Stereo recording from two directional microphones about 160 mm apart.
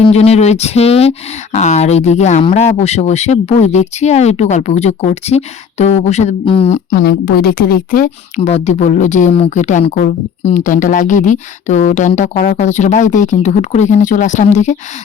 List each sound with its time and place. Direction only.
0.0 s speech: 40° left (ahead or behind)
6.9 s a woman's voice: 90° left; by 8.1 s 60° left (ahead or behind)
8.4 s speech: 40° left (ahead or behind)